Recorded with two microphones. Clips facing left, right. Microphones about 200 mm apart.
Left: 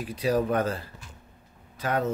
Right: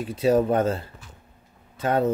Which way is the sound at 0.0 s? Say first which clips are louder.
Right 5 dB; 25° right (ahead or behind).